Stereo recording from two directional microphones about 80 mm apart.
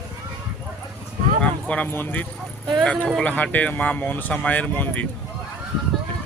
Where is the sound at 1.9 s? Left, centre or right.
Left.